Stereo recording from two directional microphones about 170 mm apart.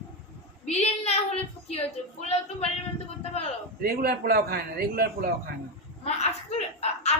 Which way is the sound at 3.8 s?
65° right (ahead or behind).